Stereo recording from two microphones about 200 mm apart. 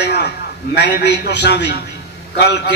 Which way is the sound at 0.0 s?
55° left (ahead or behind).